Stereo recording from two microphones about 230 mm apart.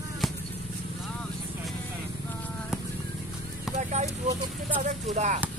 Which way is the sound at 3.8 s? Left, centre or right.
Right.